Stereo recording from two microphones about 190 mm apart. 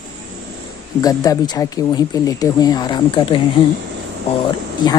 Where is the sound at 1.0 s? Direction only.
20° left (ahead or behind).